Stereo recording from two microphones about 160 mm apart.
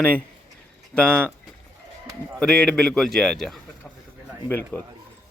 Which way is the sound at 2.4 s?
5° left (ahead or behind).